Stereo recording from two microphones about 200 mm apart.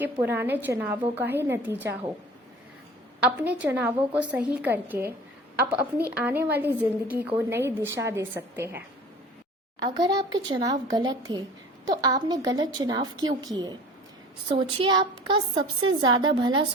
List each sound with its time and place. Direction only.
0.0 s a woman's voice: 10° right (ahead or behind)
3.2 s a woman's voice: 5° right (ahead or behind)
6.1 s a woman's voice: 10° right (ahead or behind)
9.8 s a woman's voice: 20° right (ahead or behind)